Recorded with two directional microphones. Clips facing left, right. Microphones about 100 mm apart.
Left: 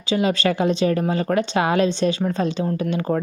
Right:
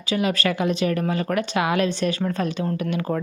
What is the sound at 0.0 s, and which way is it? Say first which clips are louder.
A woman's voice: left 3 dB; 30° left (ahead or behind).